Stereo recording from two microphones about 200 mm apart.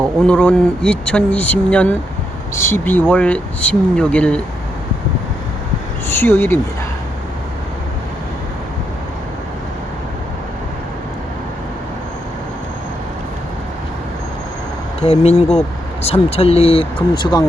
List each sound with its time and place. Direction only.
0.2 s speech: 5° left (ahead or behind)
6.1 s speech: 10° left (ahead or behind)
15.0 s speech: 30° left (ahead or behind)